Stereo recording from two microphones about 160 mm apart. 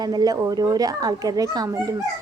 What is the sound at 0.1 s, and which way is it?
A woman's voice, 25° right (ahead or behind).